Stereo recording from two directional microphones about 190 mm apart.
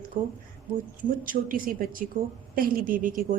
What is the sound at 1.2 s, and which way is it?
A woman's voice, 50° right (ahead or behind).